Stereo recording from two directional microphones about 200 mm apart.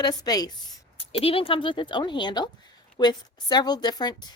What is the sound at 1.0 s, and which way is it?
Speech, 30° left (ahead or behind).